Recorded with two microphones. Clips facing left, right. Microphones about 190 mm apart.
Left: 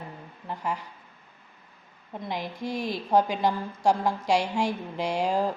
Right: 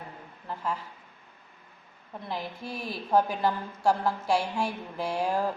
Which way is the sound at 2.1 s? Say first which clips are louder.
Left 2 dB; 15° left (ahead or behind).